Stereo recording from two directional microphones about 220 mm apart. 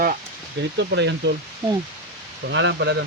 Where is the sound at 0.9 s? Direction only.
50° right (ahead or behind).